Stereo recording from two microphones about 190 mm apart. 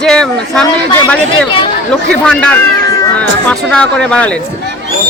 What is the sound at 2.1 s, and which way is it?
Speech, 5° left (ahead or behind).